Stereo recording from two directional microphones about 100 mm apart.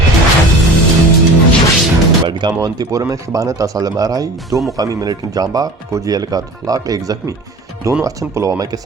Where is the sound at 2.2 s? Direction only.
50° right (ahead or behind).